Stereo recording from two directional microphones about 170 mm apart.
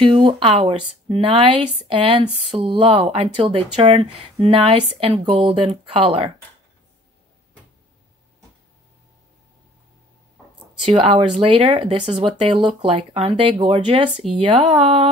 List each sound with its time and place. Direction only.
0.0 s speech: 25° right (ahead or behind)
10.9 s speech: 30° right (ahead or behind)